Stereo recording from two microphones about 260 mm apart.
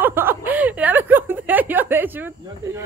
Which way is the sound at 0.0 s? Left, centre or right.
Centre.